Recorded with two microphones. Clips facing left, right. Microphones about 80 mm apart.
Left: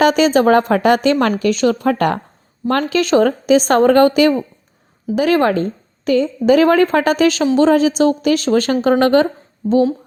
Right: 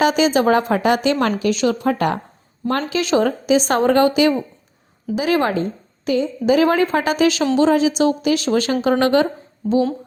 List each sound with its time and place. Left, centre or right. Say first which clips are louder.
0.0 s a woman's voice: left 3 dB; left